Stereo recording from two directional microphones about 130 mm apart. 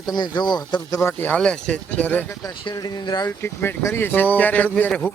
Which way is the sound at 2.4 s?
30° left (ahead or behind).